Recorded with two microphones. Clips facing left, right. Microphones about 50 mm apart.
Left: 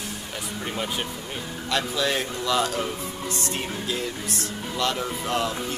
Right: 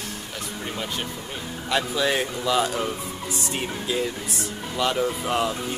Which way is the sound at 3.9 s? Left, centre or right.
Centre.